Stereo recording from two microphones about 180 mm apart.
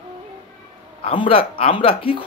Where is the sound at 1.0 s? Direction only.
30° left (ahead or behind).